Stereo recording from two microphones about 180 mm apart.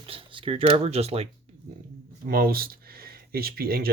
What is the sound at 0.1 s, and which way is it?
Speech, 30° right (ahead or behind).